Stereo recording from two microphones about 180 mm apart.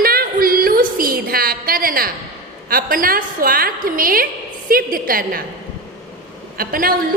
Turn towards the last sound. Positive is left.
turn(degrees=-55)  # may be behind; listen again after turning